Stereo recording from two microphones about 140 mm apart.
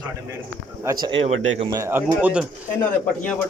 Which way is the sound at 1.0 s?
40° right (ahead or behind).